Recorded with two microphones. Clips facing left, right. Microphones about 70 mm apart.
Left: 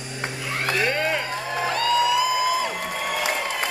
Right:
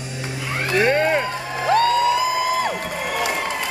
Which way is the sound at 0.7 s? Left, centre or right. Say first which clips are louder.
Right 7 dB; right.